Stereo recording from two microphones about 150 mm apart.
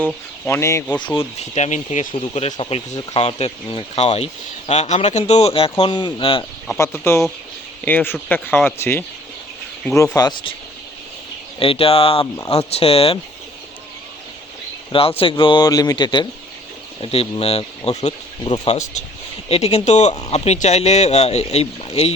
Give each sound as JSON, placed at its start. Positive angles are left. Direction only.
{"t": 0.0, "sound": "speech", "side_deg": 15}
{"t": 1.5, "sound": "speech", "side_deg": 50}
{"t": 2.9, "sound": "speech", "side_deg": 25}
{"t": 3.2, "sound": "speech", "side_deg": 40}
{"t": 5.8, "sound": "speech", "side_deg": 30}
{"t": 6.7, "sound": "speech", "side_deg": 15}
{"t": 11.6, "sound": "speech", "side_deg": 40}
{"t": 14.9, "sound": "speech", "side_deg": 40}